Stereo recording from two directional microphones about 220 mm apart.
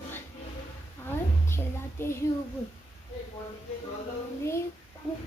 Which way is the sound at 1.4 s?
10° left (ahead or behind).